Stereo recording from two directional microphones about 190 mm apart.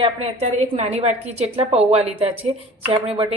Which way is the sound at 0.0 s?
30° right (ahead or behind).